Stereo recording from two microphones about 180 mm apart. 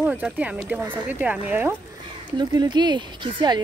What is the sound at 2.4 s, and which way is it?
Speech, 25° right (ahead or behind).